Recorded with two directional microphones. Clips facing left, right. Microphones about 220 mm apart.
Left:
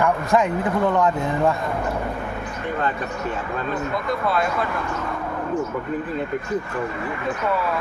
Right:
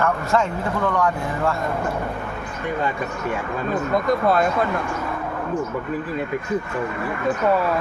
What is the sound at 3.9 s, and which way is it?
Speech, 45° right (ahead or behind).